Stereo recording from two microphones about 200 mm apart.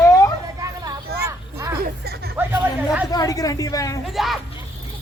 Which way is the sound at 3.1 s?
15° left (ahead or behind).